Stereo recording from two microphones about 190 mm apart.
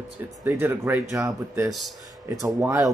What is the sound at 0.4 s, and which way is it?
Speech, 10° right (ahead or behind).